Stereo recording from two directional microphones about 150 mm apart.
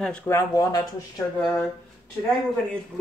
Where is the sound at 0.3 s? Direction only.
20° left (ahead or behind).